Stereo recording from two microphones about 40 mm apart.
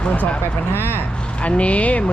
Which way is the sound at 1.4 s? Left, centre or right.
Left.